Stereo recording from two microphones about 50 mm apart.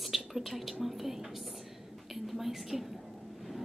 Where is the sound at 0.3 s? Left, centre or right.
Centre.